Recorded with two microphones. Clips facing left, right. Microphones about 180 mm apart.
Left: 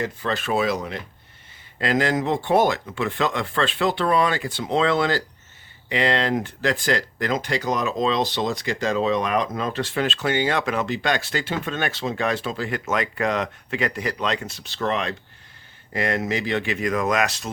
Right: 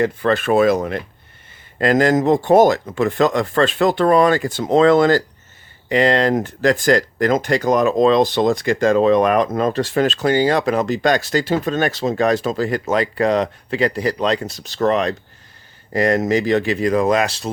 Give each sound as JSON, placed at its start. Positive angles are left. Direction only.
{"t": 0.0, "sound": "speech", "side_deg": -60}